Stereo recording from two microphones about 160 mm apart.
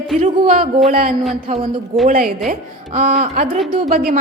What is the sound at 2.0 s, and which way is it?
A woman's voice, 65° right (ahead or behind).